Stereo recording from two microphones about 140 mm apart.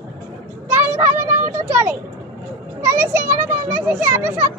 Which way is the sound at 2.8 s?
15° right (ahead or behind).